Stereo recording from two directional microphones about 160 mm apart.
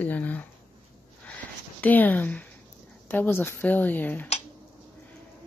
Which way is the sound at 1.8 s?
10° left (ahead or behind).